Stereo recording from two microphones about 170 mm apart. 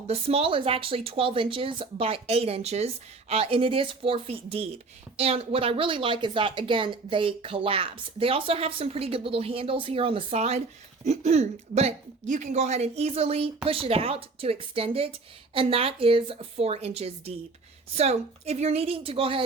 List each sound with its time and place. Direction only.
0.1 s a woman's voice: 35° right (ahead or behind)